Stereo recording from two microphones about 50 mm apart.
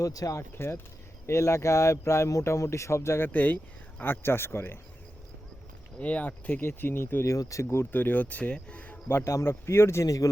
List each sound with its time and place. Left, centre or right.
0.5 s speech: left
1.3 s speech: left
3.2 s speech: left
4.0 s speech: left
6.0 s speech: left
6.6 s speech: left
7.3 s speech: left
7.9 s speech: left
9.0 s speech: left
9.3 s speech: left